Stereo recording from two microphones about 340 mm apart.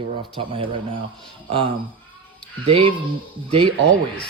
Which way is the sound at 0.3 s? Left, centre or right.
Centre.